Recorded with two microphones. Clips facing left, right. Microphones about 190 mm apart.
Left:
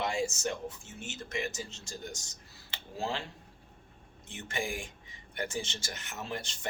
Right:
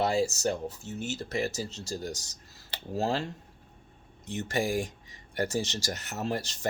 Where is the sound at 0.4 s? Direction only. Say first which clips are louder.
Right 5 dB; 35° right (ahead or behind).